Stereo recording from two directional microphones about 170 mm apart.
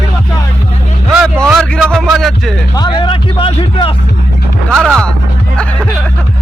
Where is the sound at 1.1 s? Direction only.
Centre (ahead or behind).